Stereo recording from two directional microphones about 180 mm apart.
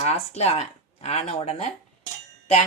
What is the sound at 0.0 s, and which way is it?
Speech, 35° left (ahead or behind).